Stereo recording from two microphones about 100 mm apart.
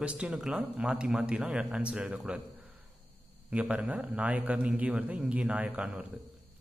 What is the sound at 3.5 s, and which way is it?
A man's voice, 10° right (ahead or behind).